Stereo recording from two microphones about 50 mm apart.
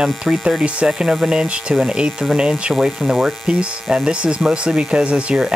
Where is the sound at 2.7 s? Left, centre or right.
Centre.